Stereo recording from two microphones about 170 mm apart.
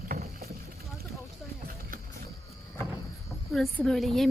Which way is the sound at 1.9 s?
55° right (ahead or behind).